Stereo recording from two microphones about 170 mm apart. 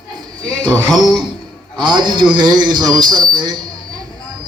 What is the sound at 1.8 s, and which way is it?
A man's voice, 25° right (ahead or behind).